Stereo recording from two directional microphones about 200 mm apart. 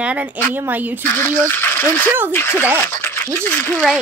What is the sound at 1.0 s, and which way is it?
Speech, 10° left (ahead or behind).